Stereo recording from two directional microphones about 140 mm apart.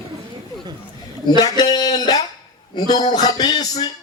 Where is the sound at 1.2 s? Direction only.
30° left (ahead or behind).